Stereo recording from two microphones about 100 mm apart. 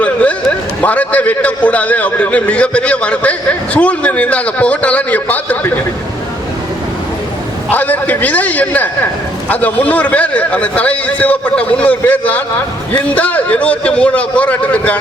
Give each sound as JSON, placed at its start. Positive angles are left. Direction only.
{"t": 0.0, "sound": "a sound", "side_deg": 15}
{"t": 0.8, "sound": "a man's voice", "side_deg": 15}
{"t": 7.7, "sound": "a man's voice", "side_deg": 15}